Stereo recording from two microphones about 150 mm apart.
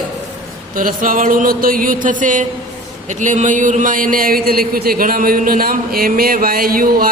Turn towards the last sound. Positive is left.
turn(degrees=-75)  # may be behind; listen again after turning